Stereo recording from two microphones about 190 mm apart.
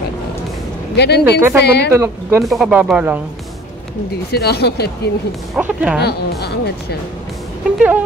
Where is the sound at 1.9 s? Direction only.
15° right (ahead or behind).